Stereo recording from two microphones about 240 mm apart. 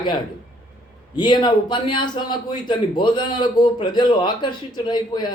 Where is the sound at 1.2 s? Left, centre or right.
Centre.